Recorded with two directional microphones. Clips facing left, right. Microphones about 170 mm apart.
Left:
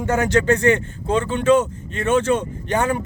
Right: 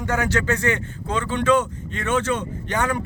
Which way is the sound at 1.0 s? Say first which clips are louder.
Left 4 dB; 25° left (ahead or behind).